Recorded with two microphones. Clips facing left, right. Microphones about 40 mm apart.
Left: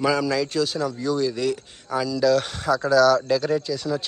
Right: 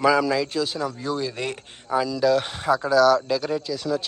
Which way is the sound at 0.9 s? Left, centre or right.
Right.